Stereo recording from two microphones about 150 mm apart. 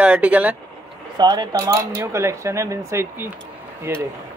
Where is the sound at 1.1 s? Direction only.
30° right (ahead or behind).